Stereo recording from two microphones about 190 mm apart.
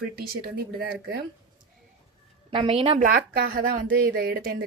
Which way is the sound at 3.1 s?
50° right (ahead or behind).